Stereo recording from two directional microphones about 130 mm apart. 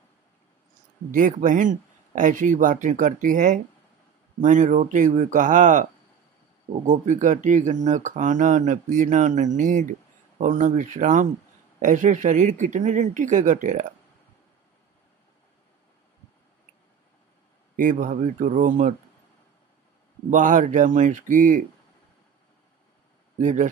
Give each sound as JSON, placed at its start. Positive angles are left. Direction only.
{"t": 1.1, "sound": "speech", "side_deg": -90}
{"t": 6.9, "sound": "speech", "side_deg": -75}
{"t": 17.7, "sound": "speech", "side_deg": -90}
{"t": 20.2, "sound": "speech", "side_deg": -80}
{"t": 23.4, "sound": "speech", "side_deg": -75}